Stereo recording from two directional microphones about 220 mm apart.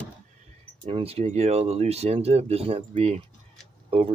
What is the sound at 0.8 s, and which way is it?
Speech, 25° right (ahead or behind).